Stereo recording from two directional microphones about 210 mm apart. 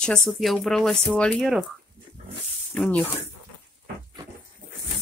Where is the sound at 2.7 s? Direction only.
5° left (ahead or behind).